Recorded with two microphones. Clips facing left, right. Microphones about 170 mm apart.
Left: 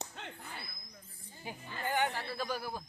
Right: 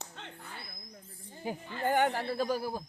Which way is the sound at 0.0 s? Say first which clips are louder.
Left 1 dB; 15° left (ahead or behind).